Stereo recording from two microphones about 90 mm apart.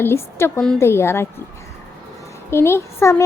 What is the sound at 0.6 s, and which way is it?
Speech, 5° left (ahead or behind).